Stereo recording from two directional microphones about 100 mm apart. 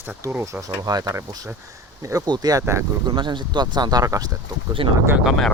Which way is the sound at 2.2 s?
40° right (ahead or behind).